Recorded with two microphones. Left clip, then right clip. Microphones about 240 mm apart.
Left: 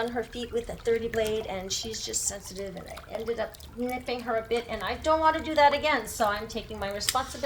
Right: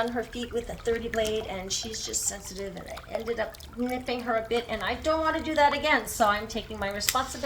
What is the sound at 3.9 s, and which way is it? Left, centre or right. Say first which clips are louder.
A woman's voice: right 1 dB; centre.